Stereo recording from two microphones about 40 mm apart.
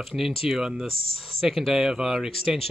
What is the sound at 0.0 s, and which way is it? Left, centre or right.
Speech, centre.